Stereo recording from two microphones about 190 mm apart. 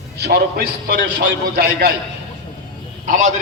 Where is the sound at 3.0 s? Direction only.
40° right (ahead or behind).